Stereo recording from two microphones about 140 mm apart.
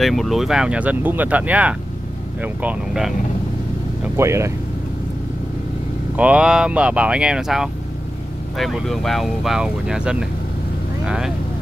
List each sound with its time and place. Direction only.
0.0 s speech: centre (ahead or behind)
4.2 s speech: 20° right (ahead or behind)
6.1 s speech: 10° right (ahead or behind)